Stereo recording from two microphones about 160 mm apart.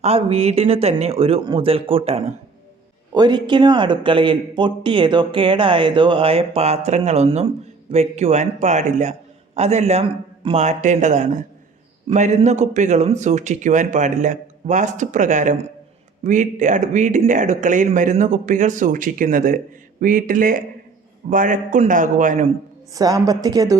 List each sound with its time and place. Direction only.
0.0 s speech: 40° right (ahead or behind)
3.1 s a man's voice: 25° right (ahead or behind); by 22.4 s 50° right (ahead or behind)
23.0 s a woman's voice: 25° right (ahead or behind)